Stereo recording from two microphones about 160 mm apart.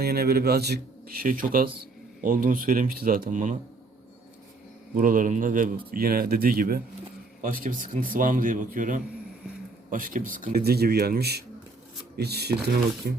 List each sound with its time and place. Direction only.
0.0 s a man's voice: 80° right; by 3.6 s 50° right (ahead or behind)
4.9 s speech: 60° right (ahead or behind)
5.9 s a man's voice: 70° right (ahead or behind); by 12.5 s 90° right
12.6 s a man's voice: 80° right